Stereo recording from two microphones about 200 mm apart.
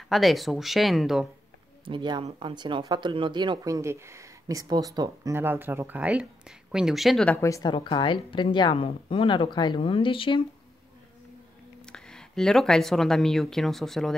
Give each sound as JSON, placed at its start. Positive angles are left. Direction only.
{"t": 0.1, "sound": "speech", "side_deg": 0}
{"t": 1.9, "sound": "speech", "side_deg": -25}
{"t": 11.8, "sound": "speech", "side_deg": 5}